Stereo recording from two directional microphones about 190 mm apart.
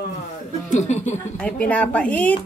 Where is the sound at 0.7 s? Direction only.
40° left (ahead or behind).